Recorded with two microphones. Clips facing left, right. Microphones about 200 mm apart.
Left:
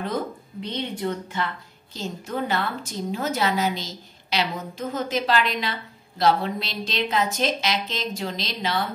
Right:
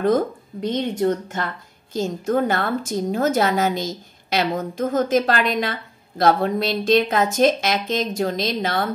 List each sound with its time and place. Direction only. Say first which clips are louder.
0.6 s a woman's voice: right 8 dB; 45° right (ahead or behind)